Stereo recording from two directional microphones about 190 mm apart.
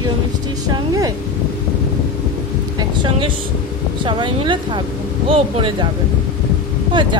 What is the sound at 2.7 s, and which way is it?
Speech, 25° right (ahead or behind).